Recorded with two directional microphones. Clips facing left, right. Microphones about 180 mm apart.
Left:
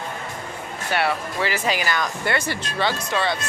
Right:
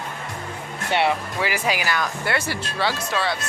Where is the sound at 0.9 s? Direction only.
20° right (ahead or behind).